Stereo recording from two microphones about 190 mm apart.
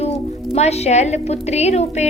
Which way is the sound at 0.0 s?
35° left (ahead or behind).